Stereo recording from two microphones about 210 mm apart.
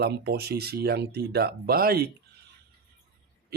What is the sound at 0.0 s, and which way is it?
Speech, 50° right (ahead or behind).